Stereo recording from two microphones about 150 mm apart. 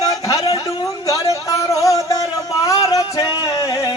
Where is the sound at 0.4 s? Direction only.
40° left (ahead or behind).